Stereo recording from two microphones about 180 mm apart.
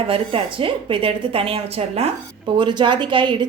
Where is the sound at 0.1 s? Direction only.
30° right (ahead or behind).